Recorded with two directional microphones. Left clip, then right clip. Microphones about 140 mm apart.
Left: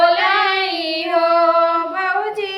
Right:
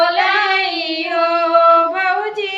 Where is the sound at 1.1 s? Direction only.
25° right (ahead or behind).